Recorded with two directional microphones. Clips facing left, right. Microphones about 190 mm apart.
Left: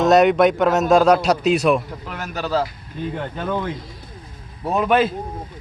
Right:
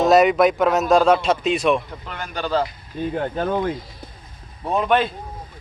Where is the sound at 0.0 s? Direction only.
Centre (ahead or behind).